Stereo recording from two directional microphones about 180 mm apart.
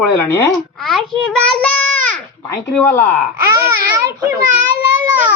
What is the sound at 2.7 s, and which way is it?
Speech, 10° left (ahead or behind).